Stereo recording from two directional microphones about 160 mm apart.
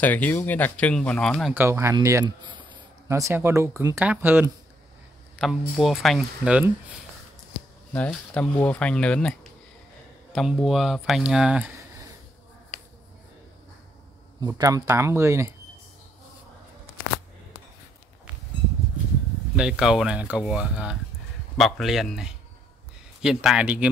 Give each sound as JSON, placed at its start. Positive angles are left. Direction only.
{"t": 0.0, "sound": "speech", "side_deg": 10}
{"t": 1.5, "sound": "speech", "side_deg": -15}
{"t": 2.4, "sound": "a sound", "side_deg": -30}
{"t": 3.1, "sound": "speech", "side_deg": -15}
{"t": 7.9, "sound": "speech", "side_deg": 10}
{"t": 14.5, "sound": "speech", "side_deg": -20}
{"t": 19.5, "sound": "speech", "side_deg": -5}